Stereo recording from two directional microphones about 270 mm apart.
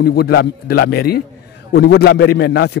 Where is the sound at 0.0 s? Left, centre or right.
Left.